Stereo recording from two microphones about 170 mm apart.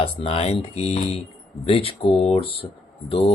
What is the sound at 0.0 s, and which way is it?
Speech, 35° left (ahead or behind).